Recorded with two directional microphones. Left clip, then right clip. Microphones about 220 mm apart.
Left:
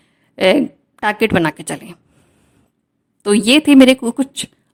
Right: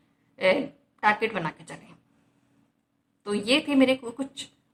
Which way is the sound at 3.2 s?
50° left (ahead or behind).